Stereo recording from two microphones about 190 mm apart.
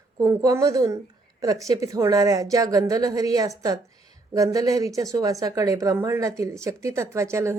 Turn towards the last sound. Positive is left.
turn(degrees=-15)  # may be behind; listen again after turning